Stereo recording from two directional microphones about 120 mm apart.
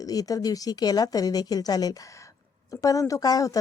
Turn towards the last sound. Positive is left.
turn(degrees=30)  # may be behind; listen again after turning